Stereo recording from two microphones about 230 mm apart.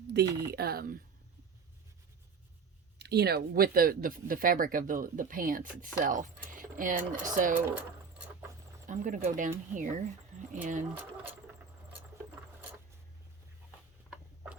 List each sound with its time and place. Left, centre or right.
0.1 s speech: right
3.0 s speech: right
8.9 s speech: right